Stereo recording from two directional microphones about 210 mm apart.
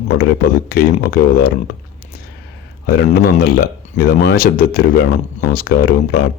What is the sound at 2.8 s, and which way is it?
Speech, 45° left (ahead or behind).